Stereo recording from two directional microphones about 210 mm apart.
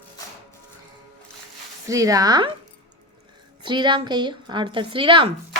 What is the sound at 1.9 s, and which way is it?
Speech, 15° right (ahead or behind).